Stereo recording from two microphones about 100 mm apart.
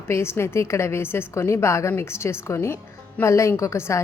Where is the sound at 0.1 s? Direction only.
25° left (ahead or behind).